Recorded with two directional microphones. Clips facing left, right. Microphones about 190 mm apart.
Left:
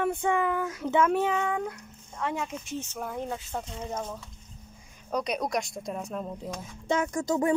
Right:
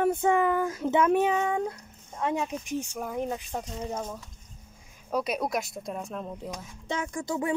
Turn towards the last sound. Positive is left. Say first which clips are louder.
# left 4 dB
turn(degrees=45)  # may be behind; listen again after turning